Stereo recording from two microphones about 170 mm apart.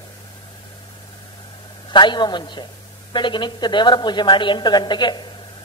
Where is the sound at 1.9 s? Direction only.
25° left (ahead or behind).